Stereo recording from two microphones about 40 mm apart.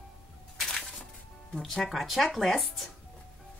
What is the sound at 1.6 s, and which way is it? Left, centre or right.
Speech, centre.